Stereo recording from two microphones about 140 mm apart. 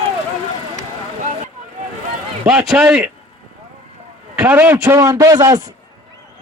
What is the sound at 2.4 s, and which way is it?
Speech, 10° right (ahead or behind).